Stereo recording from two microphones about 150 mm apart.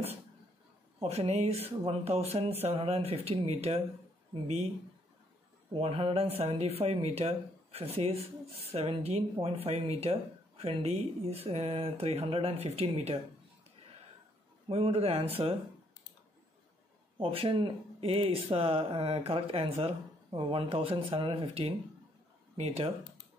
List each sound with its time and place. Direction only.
1.0 s speech: 45° right (ahead or behind)
5.7 s speech: 40° right (ahead or behind)
14.7 s speech: 40° right (ahead or behind)
17.2 s speech: 40° right (ahead or behind)